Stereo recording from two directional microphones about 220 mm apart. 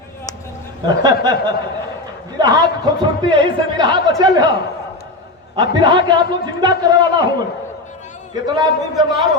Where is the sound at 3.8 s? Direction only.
20° right (ahead or behind).